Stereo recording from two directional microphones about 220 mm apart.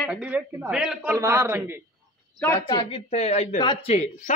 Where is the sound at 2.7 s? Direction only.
25° left (ahead or behind).